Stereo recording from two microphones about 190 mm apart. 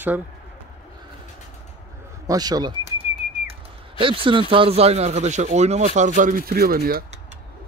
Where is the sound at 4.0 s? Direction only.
25° right (ahead or behind); by 7.1 s 50° right (ahead or behind).